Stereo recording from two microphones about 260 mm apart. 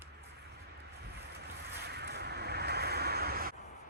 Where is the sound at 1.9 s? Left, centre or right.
Right.